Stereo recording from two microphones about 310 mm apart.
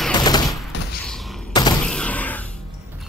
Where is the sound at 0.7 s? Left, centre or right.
Left.